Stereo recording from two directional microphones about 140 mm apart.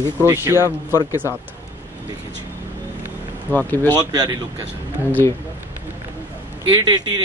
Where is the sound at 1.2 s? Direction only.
20° left (ahead or behind).